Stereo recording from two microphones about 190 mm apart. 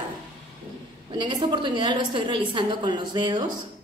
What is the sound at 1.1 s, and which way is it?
A woman's voice, 25° right (ahead or behind).